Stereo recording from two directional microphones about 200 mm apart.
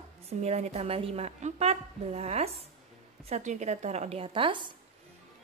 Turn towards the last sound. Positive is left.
turn(degrees=-25)  # may be behind; listen again after turning